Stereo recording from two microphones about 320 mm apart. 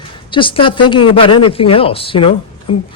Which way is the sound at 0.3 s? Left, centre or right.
Centre.